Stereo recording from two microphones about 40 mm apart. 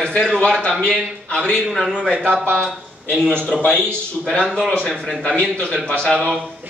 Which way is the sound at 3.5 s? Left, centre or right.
Centre.